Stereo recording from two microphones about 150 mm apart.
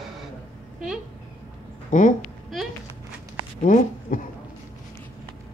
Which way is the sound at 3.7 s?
60° left (ahead or behind).